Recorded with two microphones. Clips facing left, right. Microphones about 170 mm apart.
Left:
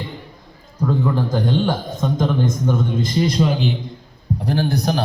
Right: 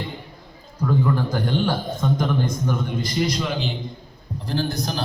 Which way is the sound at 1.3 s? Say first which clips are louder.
Left 3 dB; 20° left (ahead or behind).